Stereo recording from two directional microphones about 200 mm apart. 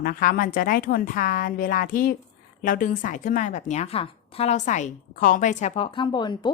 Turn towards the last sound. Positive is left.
turn(degrees=20)  # may be behind; listen again after turning